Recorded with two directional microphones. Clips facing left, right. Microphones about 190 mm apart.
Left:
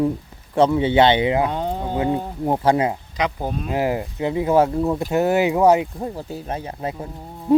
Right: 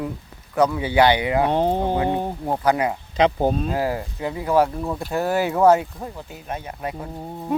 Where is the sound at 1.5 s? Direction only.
30° right (ahead or behind).